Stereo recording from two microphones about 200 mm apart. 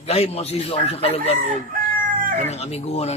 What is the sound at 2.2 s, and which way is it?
Chicken, 35° right (ahead or behind).